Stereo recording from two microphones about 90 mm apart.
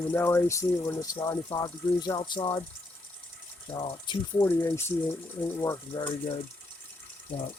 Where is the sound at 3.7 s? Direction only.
60° left (ahead or behind).